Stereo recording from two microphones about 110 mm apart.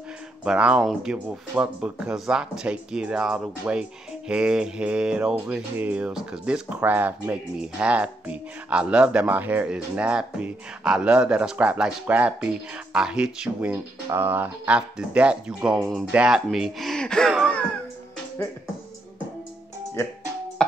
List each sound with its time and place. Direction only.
0.5 s speech: 10° right (ahead or behind)